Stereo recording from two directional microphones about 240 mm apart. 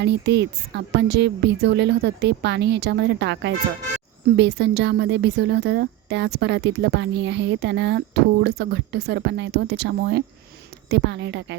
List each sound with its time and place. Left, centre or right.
0.0 s a woman's voice: right